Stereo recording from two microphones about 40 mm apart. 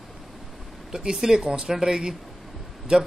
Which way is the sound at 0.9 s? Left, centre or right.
Centre.